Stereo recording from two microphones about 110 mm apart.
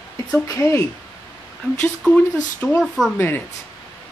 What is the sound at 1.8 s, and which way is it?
Speech, 10° left (ahead or behind).